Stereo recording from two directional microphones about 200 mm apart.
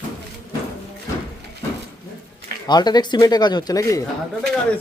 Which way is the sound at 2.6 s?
20° left (ahead or behind).